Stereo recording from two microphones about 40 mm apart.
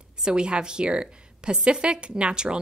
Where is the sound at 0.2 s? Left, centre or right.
Right.